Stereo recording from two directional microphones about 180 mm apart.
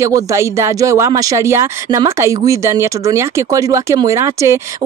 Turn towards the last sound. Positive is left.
turn(degrees=-15)  # may be behind; listen again after turning